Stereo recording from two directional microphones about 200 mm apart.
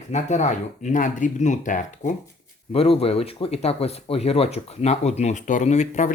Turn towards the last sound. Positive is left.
turn(degrees=35)  # may be behind; listen again after turning